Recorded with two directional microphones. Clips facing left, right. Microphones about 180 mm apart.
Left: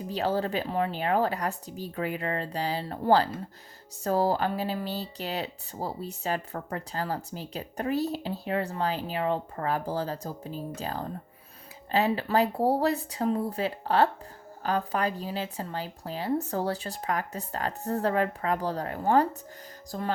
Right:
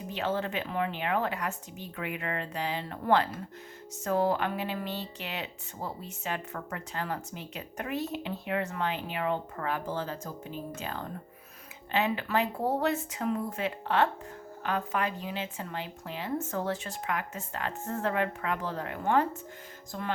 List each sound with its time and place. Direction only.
0.1 s speech: 35° left (ahead or behind)